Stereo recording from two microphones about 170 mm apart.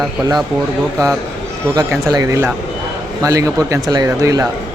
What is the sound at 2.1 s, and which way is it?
Speech, 20° right (ahead or behind).